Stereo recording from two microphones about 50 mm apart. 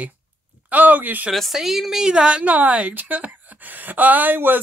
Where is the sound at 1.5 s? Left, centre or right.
Centre.